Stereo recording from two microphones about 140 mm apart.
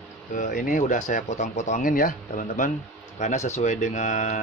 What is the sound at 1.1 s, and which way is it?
Speech, 55° left (ahead or behind).